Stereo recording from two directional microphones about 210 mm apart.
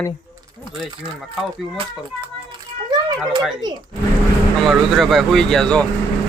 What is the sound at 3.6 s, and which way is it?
Speech, 20° right (ahead or behind).